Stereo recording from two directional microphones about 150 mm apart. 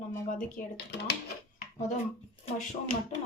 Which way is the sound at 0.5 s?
90° left.